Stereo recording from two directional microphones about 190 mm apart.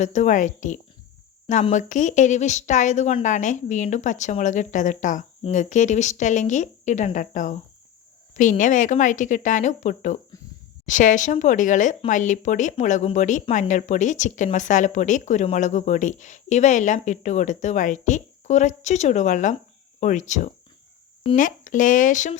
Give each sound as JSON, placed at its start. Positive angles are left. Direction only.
{"t": 0.0, "sound": "a woman's voice", "side_deg": 40}